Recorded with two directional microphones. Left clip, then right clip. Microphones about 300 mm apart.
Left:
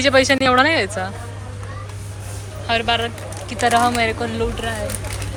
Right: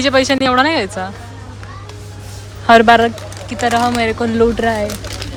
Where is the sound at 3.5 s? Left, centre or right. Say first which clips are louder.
Right 1 dB; centre.